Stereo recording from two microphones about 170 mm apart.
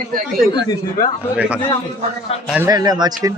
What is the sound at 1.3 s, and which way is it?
Speech, 5° right (ahead or behind).